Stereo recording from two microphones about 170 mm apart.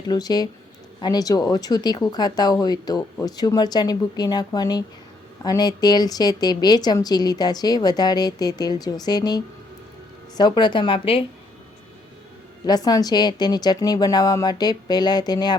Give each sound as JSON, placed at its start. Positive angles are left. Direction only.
{"t": 0.1, "sound": "a woman's voice", "side_deg": 25}
{"t": 12.6, "sound": "a woman's voice", "side_deg": 25}